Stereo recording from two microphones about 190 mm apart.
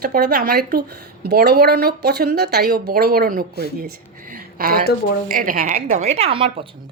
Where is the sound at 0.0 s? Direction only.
55° right (ahead or behind); by 6.7 s 30° right (ahead or behind).